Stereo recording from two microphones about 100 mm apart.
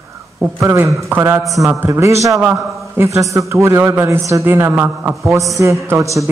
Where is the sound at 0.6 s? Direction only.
30° right (ahead or behind).